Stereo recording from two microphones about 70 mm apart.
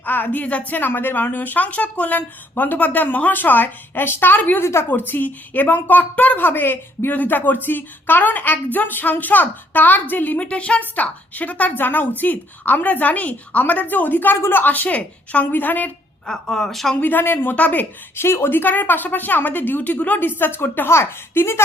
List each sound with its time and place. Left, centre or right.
0.0 s a woman's voice: left
4.6 s a woman's voice: left
16.2 s speech: centre
17.0 s a woman's voice: left
18.2 s a woman's voice: left